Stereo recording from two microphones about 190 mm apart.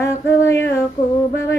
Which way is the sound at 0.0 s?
15° left (ahead or behind).